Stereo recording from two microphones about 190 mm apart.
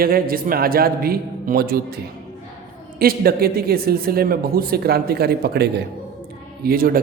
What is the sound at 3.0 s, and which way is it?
A man's voice, 50° right (ahead or behind).